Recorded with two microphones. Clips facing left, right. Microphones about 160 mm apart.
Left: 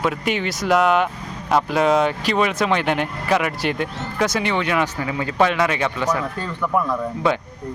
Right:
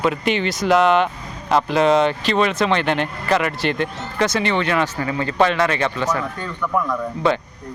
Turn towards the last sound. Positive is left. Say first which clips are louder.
# right 1 dB
turn(degrees=10)  # may be behind; listen again after turning